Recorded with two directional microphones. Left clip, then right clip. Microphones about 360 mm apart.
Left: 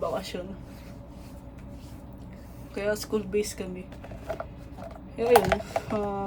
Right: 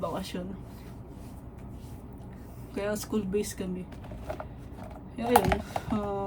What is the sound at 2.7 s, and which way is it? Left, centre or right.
Speech, centre.